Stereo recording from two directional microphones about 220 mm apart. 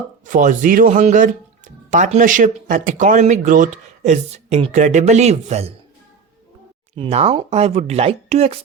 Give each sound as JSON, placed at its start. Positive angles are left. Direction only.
{"t": 0.3, "sound": "speech", "side_deg": -35}
{"t": 6.9, "sound": "speech", "side_deg": -25}